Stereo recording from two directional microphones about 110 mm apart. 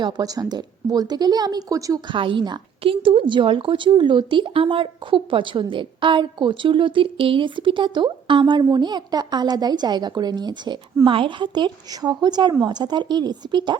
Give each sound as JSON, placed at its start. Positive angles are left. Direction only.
{"t": 0.0, "sound": "a woman's voice", "side_deg": -40}
{"t": 2.0, "sound": "a woman's voice", "side_deg": -50}